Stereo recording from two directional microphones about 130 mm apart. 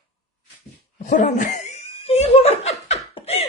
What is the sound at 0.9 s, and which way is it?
Chuckle, 70° left (ahead or behind).